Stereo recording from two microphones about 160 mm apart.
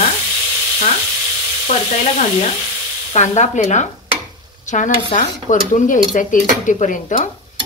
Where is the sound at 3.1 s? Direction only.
45° left (ahead or behind).